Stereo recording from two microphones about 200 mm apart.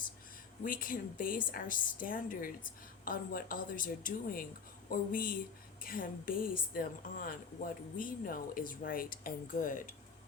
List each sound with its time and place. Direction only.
0.6 s a woman's voice: 45° left (ahead or behind)